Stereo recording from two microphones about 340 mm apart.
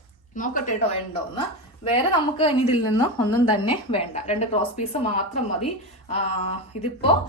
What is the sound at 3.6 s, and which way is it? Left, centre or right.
A woman's voice, centre.